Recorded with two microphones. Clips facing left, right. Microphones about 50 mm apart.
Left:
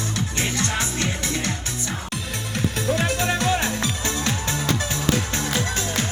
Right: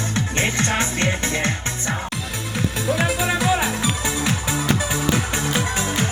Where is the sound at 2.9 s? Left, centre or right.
Centre.